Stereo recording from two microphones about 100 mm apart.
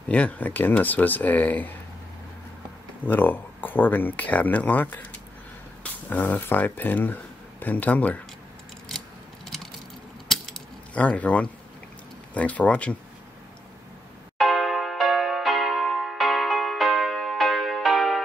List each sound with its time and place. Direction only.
0.1 s speech: 15° left (ahead or behind)
3.1 s speech: 20° left (ahead or behind)
6.0 s speech: 15° left (ahead or behind)
10.2 s coin: 5° left (ahead or behind)
11.0 s speech: 15° left (ahead or behind)
14.4 s music: centre (ahead or behind)